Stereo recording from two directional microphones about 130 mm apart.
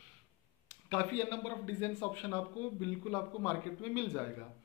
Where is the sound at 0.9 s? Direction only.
15° left (ahead or behind).